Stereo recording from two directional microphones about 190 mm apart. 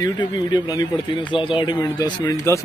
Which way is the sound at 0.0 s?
20° left (ahead or behind).